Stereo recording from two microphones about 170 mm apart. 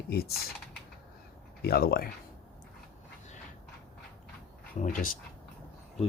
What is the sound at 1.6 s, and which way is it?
Speech, 65° left (ahead or behind).